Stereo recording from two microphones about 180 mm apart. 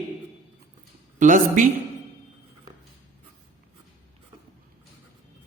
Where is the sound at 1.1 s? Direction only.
45° right (ahead or behind).